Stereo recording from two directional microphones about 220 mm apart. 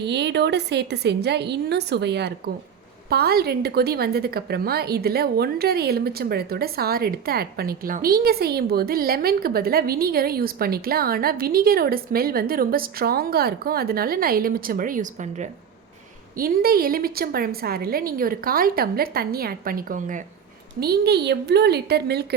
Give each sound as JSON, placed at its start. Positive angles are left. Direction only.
{"t": 0.0, "sound": "a woman's voice", "side_deg": -50}